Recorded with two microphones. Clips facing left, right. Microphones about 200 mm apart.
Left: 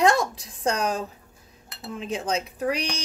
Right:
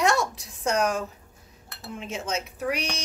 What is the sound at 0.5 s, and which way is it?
Speech, 35° left (ahead or behind).